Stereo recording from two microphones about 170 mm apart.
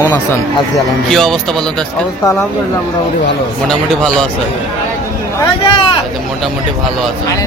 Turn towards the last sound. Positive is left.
turn(degrees=30)  # may be behind; listen again after turning